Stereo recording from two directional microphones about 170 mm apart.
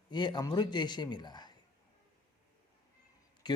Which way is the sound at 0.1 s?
25° left (ahead or behind).